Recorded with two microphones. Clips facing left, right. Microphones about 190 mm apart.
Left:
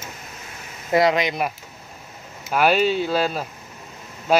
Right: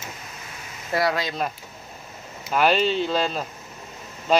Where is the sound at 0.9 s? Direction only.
20° left (ahead or behind).